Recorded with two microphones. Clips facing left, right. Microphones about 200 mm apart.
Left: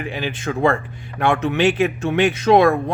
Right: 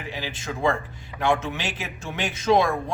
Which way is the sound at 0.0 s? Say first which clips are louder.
Left 8 dB; 60° left (ahead or behind).